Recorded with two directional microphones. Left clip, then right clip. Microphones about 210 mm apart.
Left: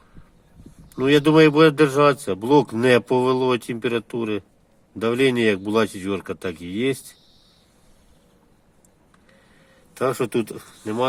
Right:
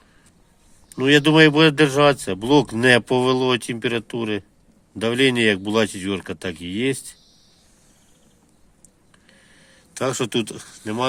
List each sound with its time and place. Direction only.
0.9 s speech: 35° right (ahead or behind)
10.0 s speech: 40° right (ahead or behind)